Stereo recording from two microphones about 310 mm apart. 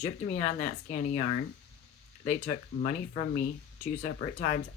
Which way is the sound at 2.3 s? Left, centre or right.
Left.